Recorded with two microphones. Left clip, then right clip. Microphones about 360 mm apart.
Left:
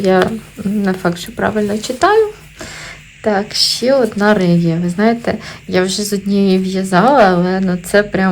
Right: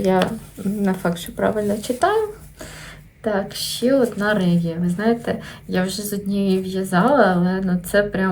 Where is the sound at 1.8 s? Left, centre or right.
Left.